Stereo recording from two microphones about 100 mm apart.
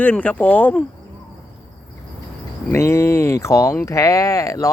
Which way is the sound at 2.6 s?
25° left (ahead or behind).